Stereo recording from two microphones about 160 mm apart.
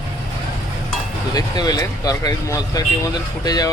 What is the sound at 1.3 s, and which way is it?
Speech, 25° left (ahead or behind).